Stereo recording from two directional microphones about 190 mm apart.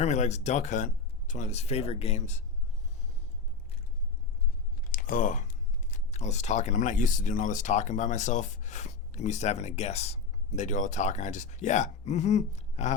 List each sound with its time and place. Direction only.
0.0 s speech: 35° left (ahead or behind)
4.9 s speech: 45° left (ahead or behind)